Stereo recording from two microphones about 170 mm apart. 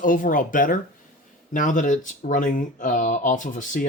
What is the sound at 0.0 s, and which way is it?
Speech, 50° left (ahead or behind).